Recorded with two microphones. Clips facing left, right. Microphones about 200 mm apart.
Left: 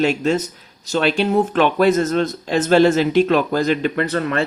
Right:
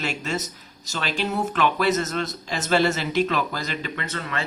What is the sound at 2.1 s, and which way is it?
Speech, 40° left (ahead or behind).